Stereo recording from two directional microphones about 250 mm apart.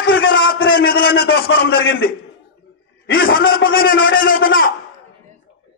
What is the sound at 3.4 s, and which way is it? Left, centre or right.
Speech, left.